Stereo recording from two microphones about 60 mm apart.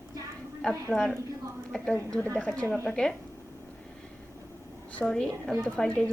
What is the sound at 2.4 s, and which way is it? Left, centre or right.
Speech, left.